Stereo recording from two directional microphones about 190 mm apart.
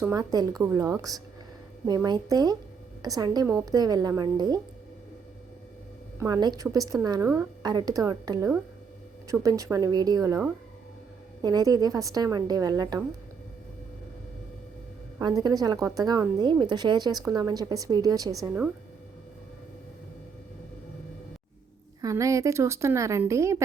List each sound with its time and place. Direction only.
0.0 s speech: 15° right (ahead or behind)
6.1 s speech: 20° right (ahead or behind)
15.2 s speech: 20° right (ahead or behind)
22.0 s speech: 15° right (ahead or behind)